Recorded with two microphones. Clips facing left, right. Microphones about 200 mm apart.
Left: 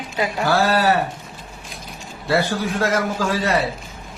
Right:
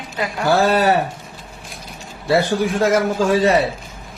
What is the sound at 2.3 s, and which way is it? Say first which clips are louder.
A man's voice: right 4 dB; 20° right (ahead or behind).